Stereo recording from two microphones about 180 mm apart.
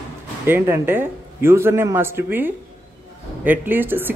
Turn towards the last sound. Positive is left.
turn(degrees=-10)  # may be behind; listen again after turning